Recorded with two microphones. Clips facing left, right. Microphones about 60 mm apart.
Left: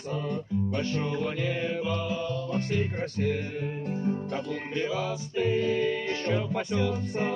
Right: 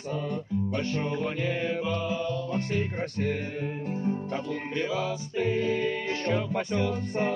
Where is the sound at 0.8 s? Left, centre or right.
Right.